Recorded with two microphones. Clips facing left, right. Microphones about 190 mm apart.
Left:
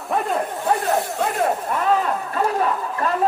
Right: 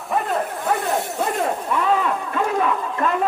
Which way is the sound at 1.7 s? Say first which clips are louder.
Even; 45° left (ahead or behind).